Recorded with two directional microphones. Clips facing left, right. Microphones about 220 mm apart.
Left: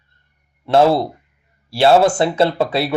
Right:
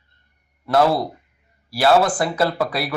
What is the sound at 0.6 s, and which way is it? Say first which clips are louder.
Speech: left 4 dB; 25° left (ahead or behind).